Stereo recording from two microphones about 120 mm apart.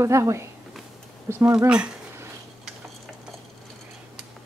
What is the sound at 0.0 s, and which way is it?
Speech, 25° right (ahead or behind).